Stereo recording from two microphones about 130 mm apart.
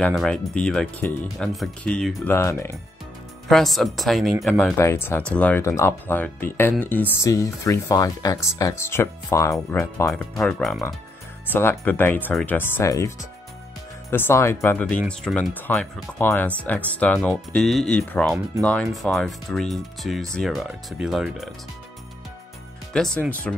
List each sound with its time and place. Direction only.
0.1 s speech: 5° left (ahead or behind)
2.3 s speech: 20° left (ahead or behind)
3.4 s speech: centre (ahead or behind)
4.7 s speech: 20° left (ahead or behind)
5.6 s speech: 20° left (ahead or behind)
10.4 s speech: 5° left (ahead or behind)
11.5 s speech: 15° left (ahead or behind)
14.1 s speech: 20° left (ahead or behind)
14.9 s speech: 5° left (ahead or behind)